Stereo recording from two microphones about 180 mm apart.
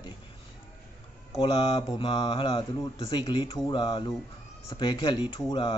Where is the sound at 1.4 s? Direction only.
25° left (ahead or behind).